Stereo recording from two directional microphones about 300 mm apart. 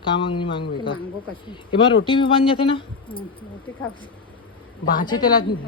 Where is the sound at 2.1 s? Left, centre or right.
Centre.